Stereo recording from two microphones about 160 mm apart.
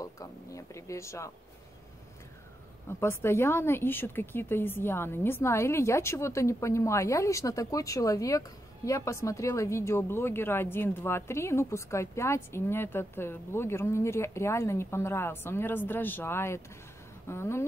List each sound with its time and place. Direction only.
0.0 s speech: 20° left (ahead or behind)
3.0 s a woman's voice: 15° left (ahead or behind)